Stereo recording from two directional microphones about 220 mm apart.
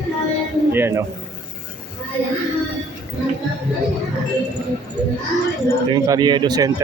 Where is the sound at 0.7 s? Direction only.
10° right (ahead or behind).